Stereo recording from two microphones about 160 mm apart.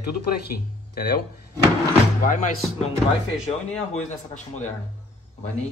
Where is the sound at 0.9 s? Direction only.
80° left.